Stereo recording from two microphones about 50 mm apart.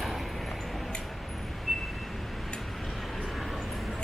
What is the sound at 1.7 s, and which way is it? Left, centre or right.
Vehicle, centre.